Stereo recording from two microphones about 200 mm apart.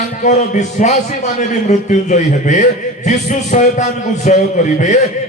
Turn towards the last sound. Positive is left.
turn(degrees=40)  # may be behind; listen again after turning